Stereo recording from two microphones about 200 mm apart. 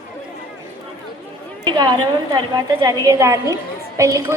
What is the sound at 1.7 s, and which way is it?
A woman's voice, 20° right (ahead or behind).